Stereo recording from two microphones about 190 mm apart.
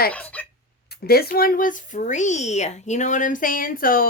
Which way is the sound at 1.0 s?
55° left (ahead or behind).